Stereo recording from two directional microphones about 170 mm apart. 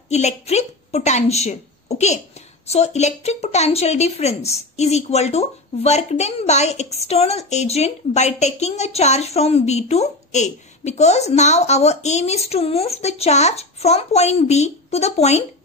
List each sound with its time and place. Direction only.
0.1 s a woman's voice: 40° left (ahead or behind)